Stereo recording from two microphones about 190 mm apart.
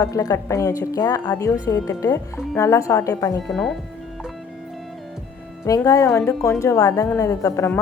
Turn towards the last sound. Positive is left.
turn(degrees=15)  # may be behind; listen again after turning